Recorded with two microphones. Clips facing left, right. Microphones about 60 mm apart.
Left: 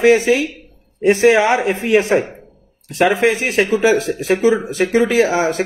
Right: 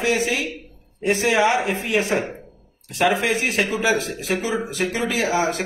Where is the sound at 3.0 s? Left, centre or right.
Left.